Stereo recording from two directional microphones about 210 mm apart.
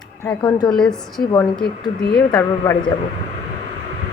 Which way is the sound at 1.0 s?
Centre (ahead or behind).